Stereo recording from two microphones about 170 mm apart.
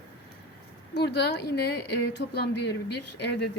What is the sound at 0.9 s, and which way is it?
A woman's voice, 90° left.